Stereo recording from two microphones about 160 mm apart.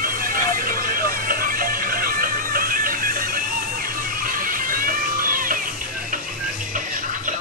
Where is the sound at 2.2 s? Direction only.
65° right (ahead or behind).